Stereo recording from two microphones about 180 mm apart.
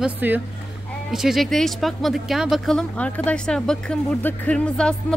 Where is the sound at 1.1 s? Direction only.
Centre (ahead or behind).